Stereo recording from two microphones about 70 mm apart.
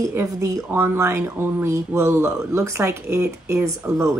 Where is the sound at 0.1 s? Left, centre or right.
Right.